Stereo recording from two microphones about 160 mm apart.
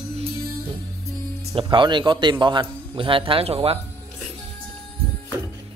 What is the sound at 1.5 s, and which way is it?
A man's voice, 30° right (ahead or behind).